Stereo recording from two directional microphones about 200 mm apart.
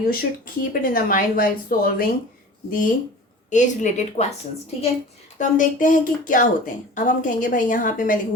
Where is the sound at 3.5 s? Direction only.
40° left (ahead or behind).